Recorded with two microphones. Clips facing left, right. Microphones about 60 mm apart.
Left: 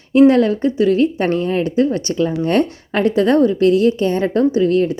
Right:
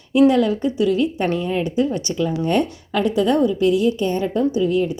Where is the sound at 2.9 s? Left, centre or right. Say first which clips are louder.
Left 4 dB; left.